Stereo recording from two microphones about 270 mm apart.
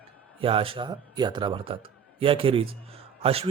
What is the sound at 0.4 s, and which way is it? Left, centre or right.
A man's voice, centre.